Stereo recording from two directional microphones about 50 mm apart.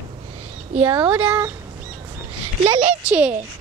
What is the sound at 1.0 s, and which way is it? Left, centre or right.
Speech, right.